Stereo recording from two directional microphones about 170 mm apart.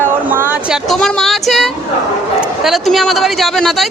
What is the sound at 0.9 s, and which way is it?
Speech, centre (ahead or behind).